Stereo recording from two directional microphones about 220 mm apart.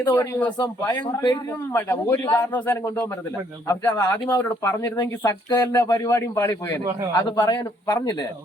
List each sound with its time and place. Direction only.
0.0 s speech: 10° left (ahead or behind)
1.0 s a man's voice: 20° left (ahead or behind)
1.5 s speech: 10° left (ahead or behind)